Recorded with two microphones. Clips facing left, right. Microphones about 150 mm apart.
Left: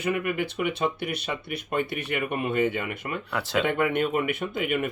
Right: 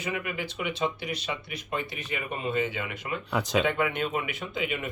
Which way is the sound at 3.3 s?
15° right (ahead or behind).